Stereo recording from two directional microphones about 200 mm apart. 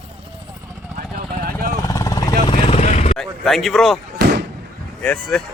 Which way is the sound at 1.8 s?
15° left (ahead or behind).